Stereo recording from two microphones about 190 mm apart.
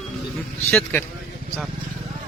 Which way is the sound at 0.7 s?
10° left (ahead or behind).